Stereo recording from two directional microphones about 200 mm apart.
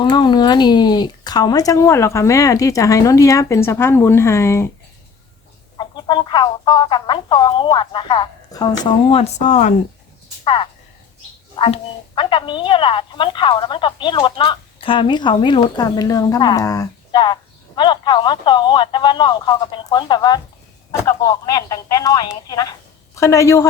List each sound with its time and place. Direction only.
0.0 s speech: 20° left (ahead or behind)
5.7 s a woman's voice: 20° left (ahead or behind)
10.4 s a woman's voice: 25° left (ahead or behind)